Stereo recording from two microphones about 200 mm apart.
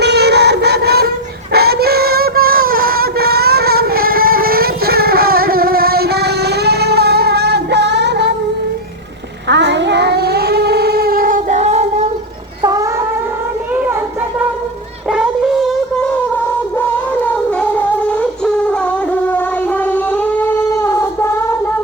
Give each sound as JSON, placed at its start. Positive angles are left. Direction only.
{"t": 0.0, "sound": "child singing", "side_deg": -55}
{"t": 1.5, "sound": "synthetic singing", "side_deg": -50}
{"t": 9.5, "sound": "child singing", "side_deg": -60}
{"t": 12.6, "sound": "a sound", "side_deg": -15}
{"t": 15.1, "sound": "cat", "side_deg": -5}
{"t": 17.6, "sound": "shofar", "side_deg": 5}